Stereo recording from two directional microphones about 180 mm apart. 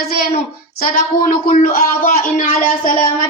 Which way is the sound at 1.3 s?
50° left (ahead or behind).